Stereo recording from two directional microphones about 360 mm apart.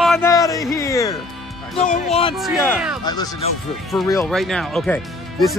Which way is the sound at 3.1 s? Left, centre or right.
Centre.